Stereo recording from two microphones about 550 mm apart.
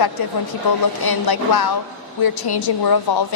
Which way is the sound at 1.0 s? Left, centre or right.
Left.